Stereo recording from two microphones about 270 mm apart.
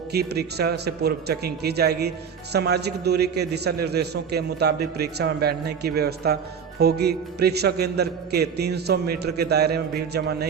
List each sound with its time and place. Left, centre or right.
0.1 s a man's voice: right